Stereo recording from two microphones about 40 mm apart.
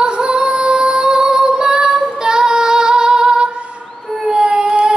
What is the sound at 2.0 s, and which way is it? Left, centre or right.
Child singing, centre.